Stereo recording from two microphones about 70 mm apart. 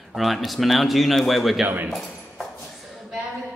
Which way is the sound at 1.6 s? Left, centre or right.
Right.